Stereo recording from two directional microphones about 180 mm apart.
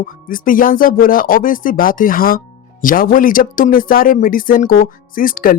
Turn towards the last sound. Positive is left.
turn(degrees=50)  # may be behind; listen again after turning